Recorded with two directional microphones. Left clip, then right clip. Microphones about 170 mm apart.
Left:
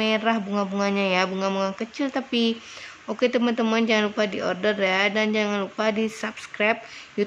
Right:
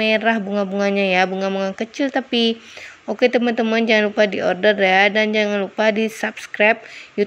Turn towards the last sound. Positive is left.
turn(degrees=-20)  # may be behind; listen again after turning